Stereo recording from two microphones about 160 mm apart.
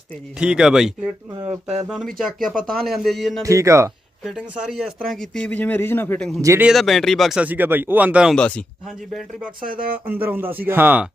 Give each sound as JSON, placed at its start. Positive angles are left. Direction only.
{"t": 0.3, "sound": "speech", "side_deg": -5}
{"t": 1.4, "sound": "speech", "side_deg": -40}
{"t": 1.9, "sound": "speech", "side_deg": 0}
{"t": 3.4, "sound": "speech", "side_deg": -20}
{"t": 4.2, "sound": "a man's voice", "side_deg": -5}
{"t": 6.4, "sound": "speech", "side_deg": -15}
{"t": 6.7, "sound": "speech", "side_deg": 0}
{"t": 8.4, "sound": "a man's voice", "side_deg": 5}
{"t": 10.1, "sound": "speech", "side_deg": -15}